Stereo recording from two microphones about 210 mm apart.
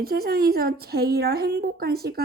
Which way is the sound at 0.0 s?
45° right (ahead or behind).